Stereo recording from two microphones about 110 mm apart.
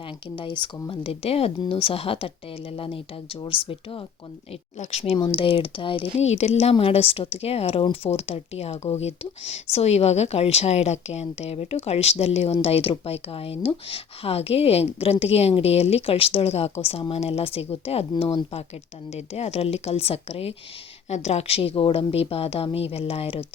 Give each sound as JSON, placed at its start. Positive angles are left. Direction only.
{"t": 0.3, "sound": "speech", "side_deg": 50}
{"t": 4.8, "sound": "speech", "side_deg": 75}
{"t": 5.2, "sound": "speech", "side_deg": 50}
{"t": 6.1, "sound": "speech", "side_deg": 85}
{"t": 12.6, "sound": "speech", "side_deg": 60}
{"t": 19.1, "sound": "speech", "side_deg": 75}
{"t": 21.1, "sound": "speech", "side_deg": 90}